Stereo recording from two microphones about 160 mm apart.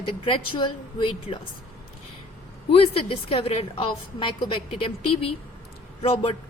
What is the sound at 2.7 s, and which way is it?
A woman's voice, 35° left (ahead or behind).